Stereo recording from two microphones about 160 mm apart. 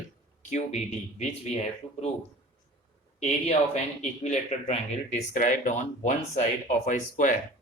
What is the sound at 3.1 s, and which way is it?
Speech, 45° left (ahead or behind).